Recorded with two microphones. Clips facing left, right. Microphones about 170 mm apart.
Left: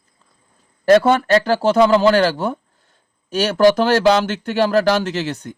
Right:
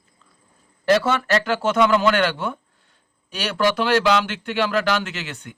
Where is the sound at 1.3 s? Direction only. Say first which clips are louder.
Left 6 dB; 35° left (ahead or behind).